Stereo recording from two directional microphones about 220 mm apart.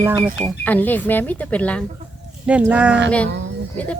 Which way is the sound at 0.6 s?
10° left (ahead or behind).